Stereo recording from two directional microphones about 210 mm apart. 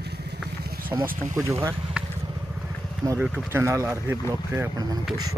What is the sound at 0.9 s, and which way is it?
Speech, 15° right (ahead or behind).